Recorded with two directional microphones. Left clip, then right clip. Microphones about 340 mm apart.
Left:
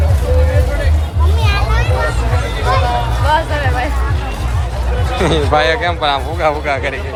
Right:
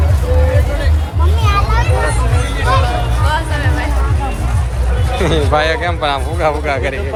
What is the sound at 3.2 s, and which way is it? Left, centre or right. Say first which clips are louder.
Music: left 5 dB; left.